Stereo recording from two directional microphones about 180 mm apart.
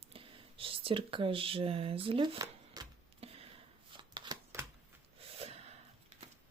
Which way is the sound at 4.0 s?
25° right (ahead or behind).